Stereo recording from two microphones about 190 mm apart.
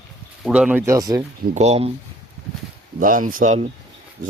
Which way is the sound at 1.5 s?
35° right (ahead or behind).